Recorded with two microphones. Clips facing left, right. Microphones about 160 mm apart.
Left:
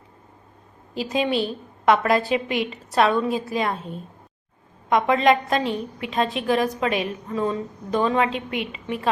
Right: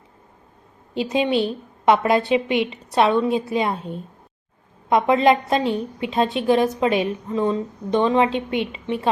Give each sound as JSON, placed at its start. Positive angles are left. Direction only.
{"t": 0.9, "sound": "a woman's voice", "side_deg": -25}
{"t": 4.9, "sound": "a woman's voice", "side_deg": -30}